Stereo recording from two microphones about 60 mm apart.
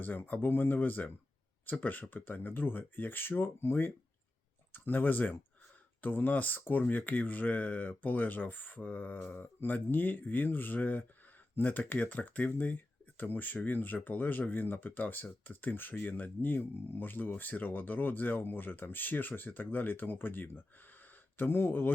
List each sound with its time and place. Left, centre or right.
0.0 s speech: left